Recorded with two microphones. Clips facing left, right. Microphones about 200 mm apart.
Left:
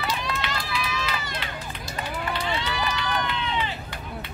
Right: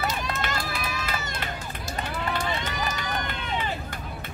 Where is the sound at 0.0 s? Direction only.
45° right (ahead or behind).